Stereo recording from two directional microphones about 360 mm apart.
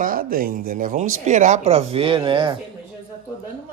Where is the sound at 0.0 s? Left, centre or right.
Right.